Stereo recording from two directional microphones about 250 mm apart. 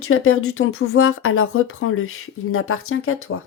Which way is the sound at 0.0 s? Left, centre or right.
Left.